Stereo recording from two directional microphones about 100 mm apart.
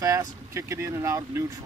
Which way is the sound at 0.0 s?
30° right (ahead or behind).